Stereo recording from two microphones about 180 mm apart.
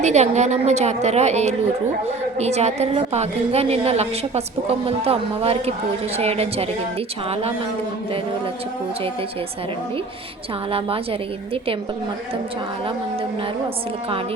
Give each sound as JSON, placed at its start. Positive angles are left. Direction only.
{"t": 0.0, "sound": "a woman's voice", "side_deg": -40}
{"t": 10.7, "sound": "a woman's voice", "side_deg": -30}